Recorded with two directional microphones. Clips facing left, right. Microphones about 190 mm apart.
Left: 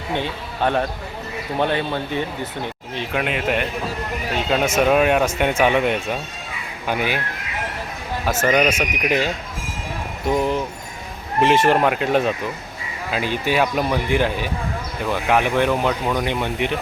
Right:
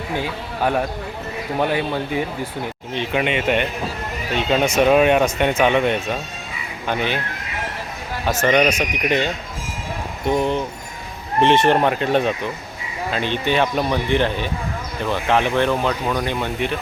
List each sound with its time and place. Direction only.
0.2 s speech: 5° right (ahead or behind)
2.9 s speech: centre (ahead or behind)
8.2 s speech: 5° left (ahead or behind)